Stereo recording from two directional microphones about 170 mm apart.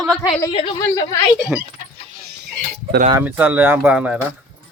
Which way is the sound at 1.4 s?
Centre (ahead or behind).